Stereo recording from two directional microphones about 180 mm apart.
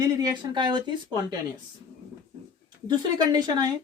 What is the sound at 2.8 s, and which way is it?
Speech, 25° right (ahead or behind).